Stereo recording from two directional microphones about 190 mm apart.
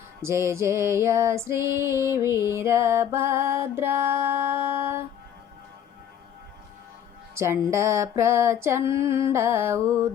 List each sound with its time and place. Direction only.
0.2 s female singing: 15° right (ahead or behind)
7.3 s female singing: 15° right (ahead or behind)